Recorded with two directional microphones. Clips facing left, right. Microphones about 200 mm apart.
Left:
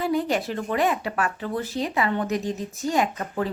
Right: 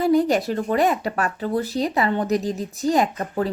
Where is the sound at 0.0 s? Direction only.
40° right (ahead or behind).